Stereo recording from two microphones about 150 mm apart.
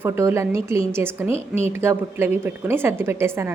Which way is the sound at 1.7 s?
15° right (ahead or behind).